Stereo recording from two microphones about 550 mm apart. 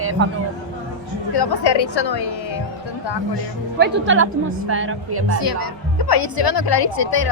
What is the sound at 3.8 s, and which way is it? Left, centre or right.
Speech, right.